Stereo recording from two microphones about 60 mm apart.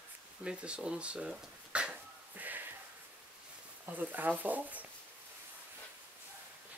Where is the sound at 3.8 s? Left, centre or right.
Right.